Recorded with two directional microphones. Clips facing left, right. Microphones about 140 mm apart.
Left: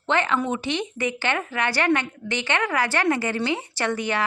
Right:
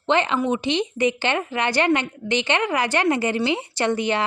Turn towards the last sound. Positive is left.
turn(degrees=-20)  # may be behind; listen again after turning